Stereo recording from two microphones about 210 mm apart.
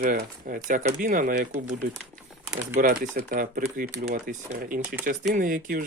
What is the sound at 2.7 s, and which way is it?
Speech, 40° right (ahead or behind).